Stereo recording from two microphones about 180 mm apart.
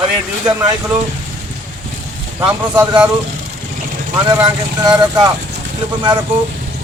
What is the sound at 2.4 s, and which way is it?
Speech, 25° right (ahead or behind).